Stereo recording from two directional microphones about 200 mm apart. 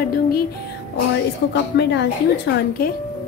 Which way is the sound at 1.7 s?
60° left (ahead or behind).